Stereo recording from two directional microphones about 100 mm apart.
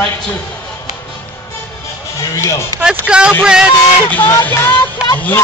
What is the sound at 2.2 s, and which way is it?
Speech, 30° left (ahead or behind).